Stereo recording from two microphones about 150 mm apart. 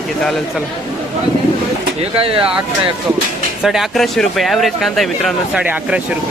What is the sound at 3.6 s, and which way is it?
Speech, centre (ahead or behind).